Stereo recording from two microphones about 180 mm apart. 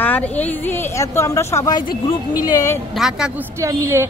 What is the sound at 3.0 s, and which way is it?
Speech, 5° right (ahead or behind).